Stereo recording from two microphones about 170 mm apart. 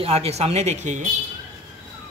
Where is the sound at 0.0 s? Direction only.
35° right (ahead or behind).